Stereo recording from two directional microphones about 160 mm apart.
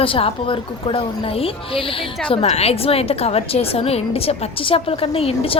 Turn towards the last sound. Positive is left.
turn(degrees=40)  # may be behind; listen again after turning